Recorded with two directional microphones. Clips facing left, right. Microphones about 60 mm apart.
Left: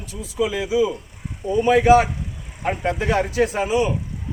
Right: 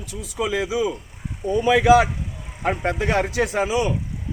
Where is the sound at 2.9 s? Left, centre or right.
Right.